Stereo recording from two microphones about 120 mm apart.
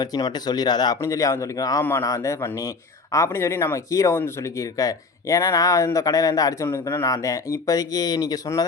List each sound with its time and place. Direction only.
0.0 s speech: 30° left (ahead or behind)
1.8 s speech: 20° left (ahead or behind)